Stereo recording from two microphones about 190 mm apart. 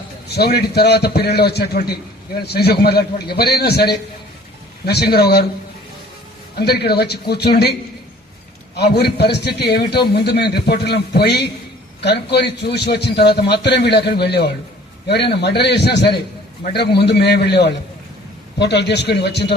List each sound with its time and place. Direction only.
0.3 s a man's voice: 55° left (ahead or behind)
6.6 s a man's voice: 55° left (ahead or behind)